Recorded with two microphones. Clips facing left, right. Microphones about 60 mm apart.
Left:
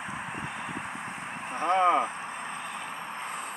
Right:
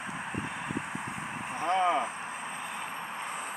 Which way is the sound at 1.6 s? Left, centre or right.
Left.